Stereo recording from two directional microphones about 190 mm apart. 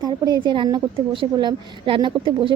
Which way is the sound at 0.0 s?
20° right (ahead or behind).